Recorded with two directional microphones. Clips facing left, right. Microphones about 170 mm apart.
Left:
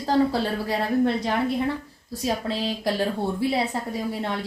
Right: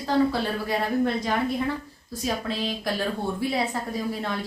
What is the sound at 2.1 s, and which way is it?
A woman's voice, 30° left (ahead or behind).